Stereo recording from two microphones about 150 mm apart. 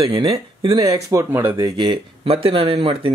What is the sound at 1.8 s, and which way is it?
Speech, 35° right (ahead or behind).